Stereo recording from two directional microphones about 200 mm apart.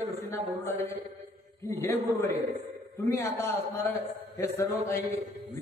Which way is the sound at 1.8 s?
15° left (ahead or behind).